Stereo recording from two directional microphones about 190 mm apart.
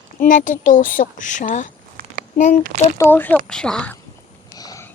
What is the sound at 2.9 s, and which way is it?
A child's voice, 10° left (ahead or behind).